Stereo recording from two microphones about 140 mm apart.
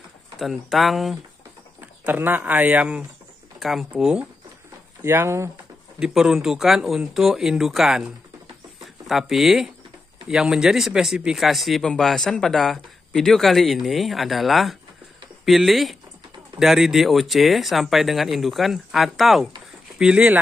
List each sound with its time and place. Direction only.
0.4 s speech: centre (ahead or behind)
1.8 s speech: 15° right (ahead or behind)
3.5 s speech: centre (ahead or behind)
5.0 s speech: 20° right (ahead or behind)
5.9 s speech: 5° right (ahead or behind)